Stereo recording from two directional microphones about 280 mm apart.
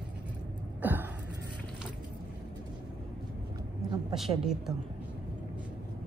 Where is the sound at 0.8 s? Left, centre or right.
Centre.